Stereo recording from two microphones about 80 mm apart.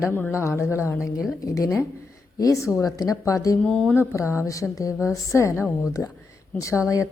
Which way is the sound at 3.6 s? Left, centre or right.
Centre.